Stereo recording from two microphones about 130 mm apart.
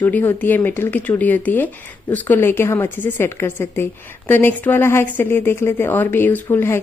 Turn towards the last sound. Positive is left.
turn(degrees=20)  # may be behind; listen again after turning